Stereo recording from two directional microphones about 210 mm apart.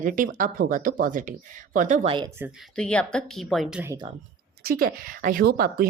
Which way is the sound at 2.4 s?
10° right (ahead or behind).